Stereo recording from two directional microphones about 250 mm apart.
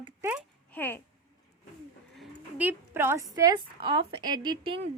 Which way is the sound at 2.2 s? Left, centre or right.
Centre.